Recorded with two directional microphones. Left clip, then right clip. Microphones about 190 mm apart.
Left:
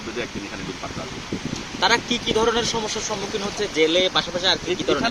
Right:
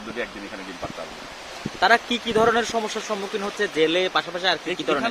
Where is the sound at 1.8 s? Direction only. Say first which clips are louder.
Right 1 dB; 35° right (ahead or behind).